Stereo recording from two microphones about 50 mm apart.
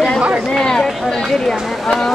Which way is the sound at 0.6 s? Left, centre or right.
Centre.